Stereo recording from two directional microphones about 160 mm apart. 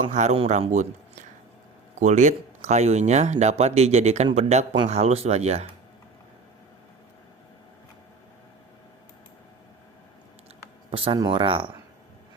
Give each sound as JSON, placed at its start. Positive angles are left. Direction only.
{"t": 0.0, "sound": "speech", "side_deg": -45}
{"t": 2.0, "sound": "speech", "side_deg": -50}
{"t": 10.9, "sound": "speech", "side_deg": -35}